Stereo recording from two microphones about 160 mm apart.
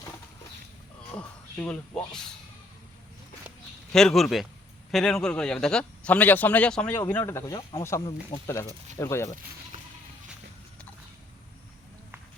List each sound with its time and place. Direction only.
1.1 s speech: 10° left (ahead or behind)
3.9 s speech: centre (ahead or behind); by 9.3 s 15° left (ahead or behind)